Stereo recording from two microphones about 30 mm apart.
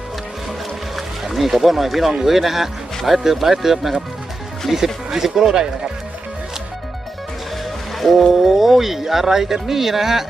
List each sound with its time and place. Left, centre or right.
0.9 s speech: centre; by 5.6 s right
7.9 s speech: centre
8.3 s speech: centre